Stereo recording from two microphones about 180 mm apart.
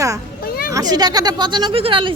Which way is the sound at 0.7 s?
20° right (ahead or behind).